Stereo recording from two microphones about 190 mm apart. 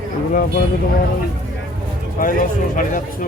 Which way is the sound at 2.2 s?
45° left (ahead or behind).